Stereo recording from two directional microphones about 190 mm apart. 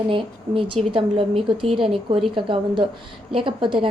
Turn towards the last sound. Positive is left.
turn(degrees=-25)  # may be behind; listen again after turning